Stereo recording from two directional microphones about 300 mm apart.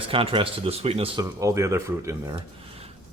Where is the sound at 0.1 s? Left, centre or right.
Centre.